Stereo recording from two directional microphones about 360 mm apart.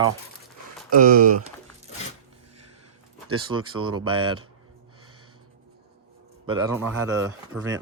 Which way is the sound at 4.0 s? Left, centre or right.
Right.